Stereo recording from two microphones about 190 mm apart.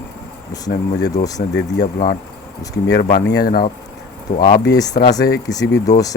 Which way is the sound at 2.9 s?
60° left (ahead or behind).